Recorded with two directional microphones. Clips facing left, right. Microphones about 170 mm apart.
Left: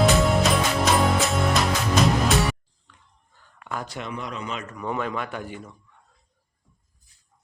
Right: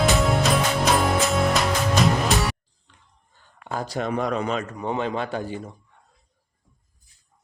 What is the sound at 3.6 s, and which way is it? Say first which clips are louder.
Speech: right 5 dB; 30° right (ahead or behind).